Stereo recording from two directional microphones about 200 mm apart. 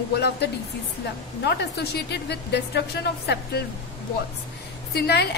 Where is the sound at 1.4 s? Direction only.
55° left (ahead or behind).